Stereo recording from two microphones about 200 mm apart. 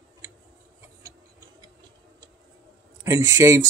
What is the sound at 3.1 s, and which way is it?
Speech, 15° right (ahead or behind).